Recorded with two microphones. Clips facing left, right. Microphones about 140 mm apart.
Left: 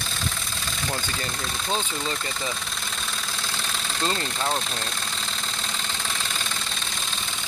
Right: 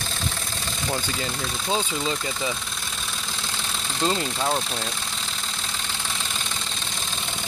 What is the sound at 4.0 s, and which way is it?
Speech, 15° right (ahead or behind).